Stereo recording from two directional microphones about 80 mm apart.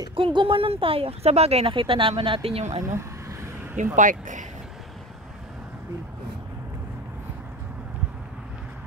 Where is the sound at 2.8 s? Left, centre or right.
Right.